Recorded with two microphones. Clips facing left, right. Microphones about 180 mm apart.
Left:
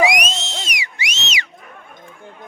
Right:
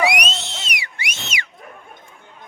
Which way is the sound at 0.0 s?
60° right (ahead or behind).